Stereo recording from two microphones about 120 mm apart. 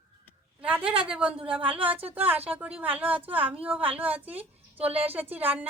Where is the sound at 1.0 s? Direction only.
10° right (ahead or behind).